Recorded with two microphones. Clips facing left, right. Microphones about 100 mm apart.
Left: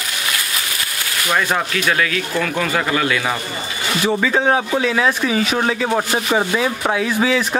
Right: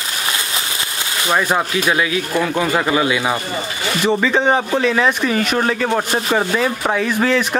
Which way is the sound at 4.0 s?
5° left (ahead or behind).